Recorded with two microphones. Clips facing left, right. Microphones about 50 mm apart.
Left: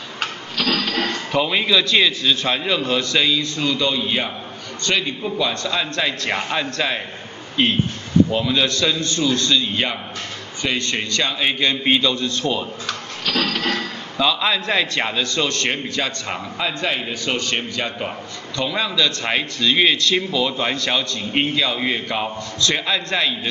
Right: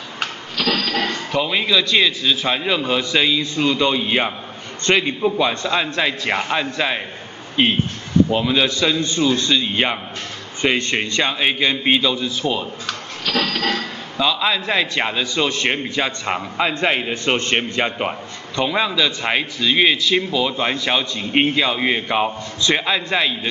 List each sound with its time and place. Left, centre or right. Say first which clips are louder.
0.7 s a man's voice: right 1 dB; centre